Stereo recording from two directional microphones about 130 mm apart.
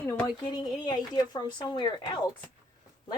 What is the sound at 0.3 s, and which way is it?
Speech, 35° left (ahead or behind).